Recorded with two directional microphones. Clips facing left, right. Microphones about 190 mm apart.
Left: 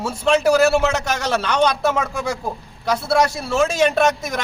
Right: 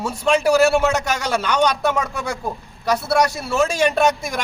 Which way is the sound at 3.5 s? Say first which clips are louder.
Left 1 dB; 10° right (ahead or behind).